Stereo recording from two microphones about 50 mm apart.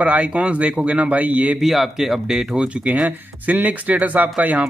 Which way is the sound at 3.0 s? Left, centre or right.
Right.